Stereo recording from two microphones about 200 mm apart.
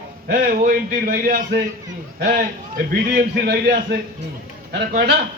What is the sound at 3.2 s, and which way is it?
A man's voice, 55° right (ahead or behind).